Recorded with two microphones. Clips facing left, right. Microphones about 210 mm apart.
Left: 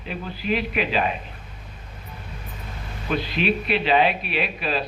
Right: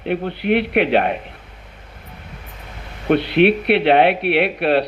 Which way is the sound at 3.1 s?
70° right (ahead or behind).